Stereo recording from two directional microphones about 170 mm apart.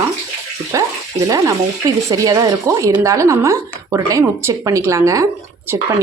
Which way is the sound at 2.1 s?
20° right (ahead or behind).